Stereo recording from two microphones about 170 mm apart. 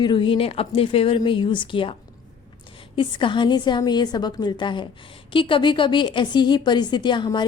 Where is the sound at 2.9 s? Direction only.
30° left (ahead or behind).